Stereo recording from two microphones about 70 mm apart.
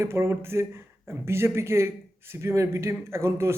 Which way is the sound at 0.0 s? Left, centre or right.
Right.